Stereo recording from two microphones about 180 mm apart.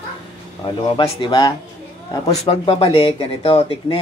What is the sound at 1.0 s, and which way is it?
Speech, 25° left (ahead or behind).